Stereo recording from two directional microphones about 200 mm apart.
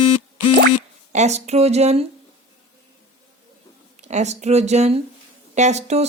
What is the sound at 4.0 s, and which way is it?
Speech, 35° right (ahead or behind).